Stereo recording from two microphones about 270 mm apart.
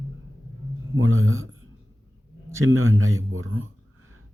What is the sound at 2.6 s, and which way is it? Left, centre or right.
Speech, right.